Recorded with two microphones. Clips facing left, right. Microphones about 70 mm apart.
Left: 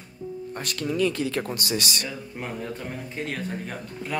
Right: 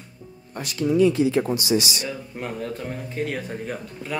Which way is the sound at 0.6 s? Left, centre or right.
Left.